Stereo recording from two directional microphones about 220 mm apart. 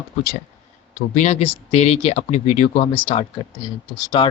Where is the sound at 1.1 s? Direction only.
30° left (ahead or behind).